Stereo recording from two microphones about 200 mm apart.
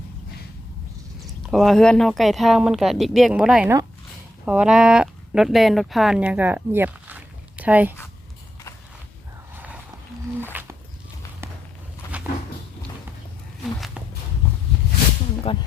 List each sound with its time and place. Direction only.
1.5 s speech: centre (ahead or behind)
10.5 s a sound: 10° right (ahead or behind)
12.1 s cupboard open or close: 5° right (ahead or behind)
15.5 s speech: 25° left (ahead or behind)